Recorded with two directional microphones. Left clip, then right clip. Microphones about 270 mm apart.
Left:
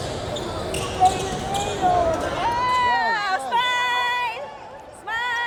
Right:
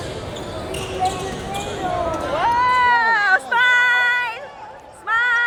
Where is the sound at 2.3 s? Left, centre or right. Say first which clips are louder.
Right 8 dB; centre.